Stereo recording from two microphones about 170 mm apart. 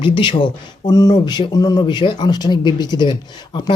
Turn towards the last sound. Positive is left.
turn(degrees=25)  # may be behind; listen again after turning